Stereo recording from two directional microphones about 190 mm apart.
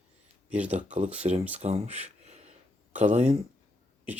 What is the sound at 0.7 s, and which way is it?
Speech, 35° right (ahead or behind).